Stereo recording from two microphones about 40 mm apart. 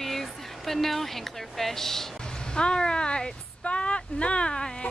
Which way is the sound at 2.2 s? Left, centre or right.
Left.